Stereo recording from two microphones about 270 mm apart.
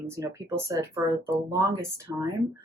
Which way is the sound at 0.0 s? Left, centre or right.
Centre.